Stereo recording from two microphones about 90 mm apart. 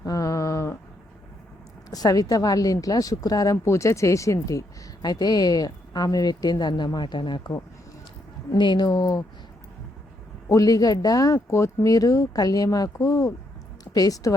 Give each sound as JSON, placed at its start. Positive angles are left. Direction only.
{"t": 0.0, "sound": "a sound", "side_deg": 40}
{"t": 1.9, "sound": "speech", "side_deg": 45}
{"t": 5.0, "sound": "a woman's voice", "side_deg": 45}
{"t": 8.5, "sound": "speech", "side_deg": 55}
{"t": 10.5, "sound": "a woman's voice", "side_deg": 40}